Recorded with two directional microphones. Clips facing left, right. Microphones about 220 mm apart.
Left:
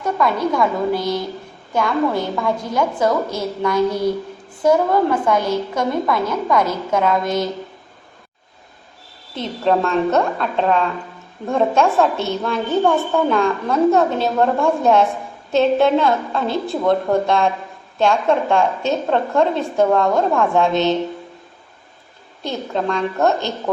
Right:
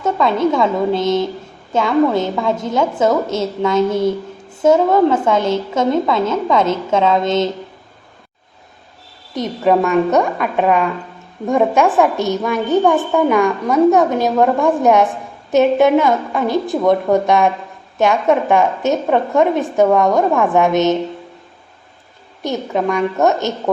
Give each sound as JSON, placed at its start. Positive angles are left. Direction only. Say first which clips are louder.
{"t": 0.0, "sound": "a woman's voice", "louder": "right 4 dB", "side_deg": -25}
{"t": 9.3, "sound": "a woman's voice", "louder": "right 3 dB", "side_deg": -15}
{"t": 22.4, "sound": "a woman's voice", "louder": "right 4 dB", "side_deg": -20}